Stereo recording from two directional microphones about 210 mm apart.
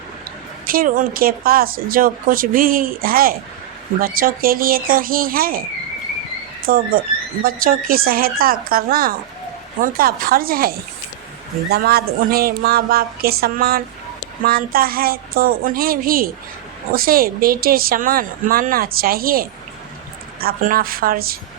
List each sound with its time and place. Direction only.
0.7 s speech: 40° right (ahead or behind)
6.7 s speech: 45° right (ahead or behind)